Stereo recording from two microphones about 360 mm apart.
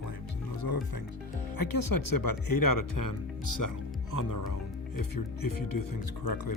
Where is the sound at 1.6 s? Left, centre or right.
Left.